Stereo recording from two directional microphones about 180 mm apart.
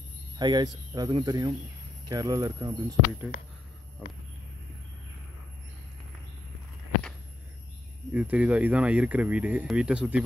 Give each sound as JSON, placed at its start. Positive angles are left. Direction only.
{"t": 0.4, "sound": "speech", "side_deg": -25}
{"t": 8.1, "sound": "speech", "side_deg": -10}